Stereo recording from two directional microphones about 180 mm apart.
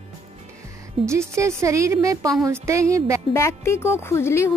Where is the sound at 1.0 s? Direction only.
15° right (ahead or behind).